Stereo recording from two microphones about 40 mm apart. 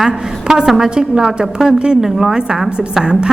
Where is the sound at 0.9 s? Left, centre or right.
Centre.